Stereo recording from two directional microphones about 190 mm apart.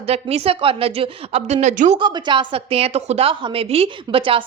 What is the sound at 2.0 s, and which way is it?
A woman's voice, 25° right (ahead or behind).